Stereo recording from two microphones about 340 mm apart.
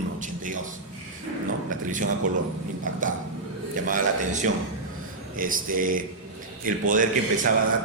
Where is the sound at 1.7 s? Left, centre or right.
Right.